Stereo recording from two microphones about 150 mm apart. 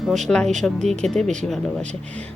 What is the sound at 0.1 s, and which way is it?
Speech, 5° left (ahead or behind).